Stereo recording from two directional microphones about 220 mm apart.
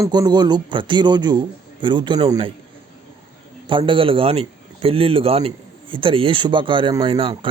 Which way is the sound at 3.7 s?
20° right (ahead or behind).